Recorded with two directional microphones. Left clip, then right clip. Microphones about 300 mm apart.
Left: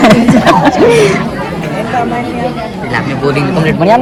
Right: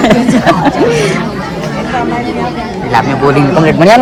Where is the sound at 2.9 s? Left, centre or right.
Right.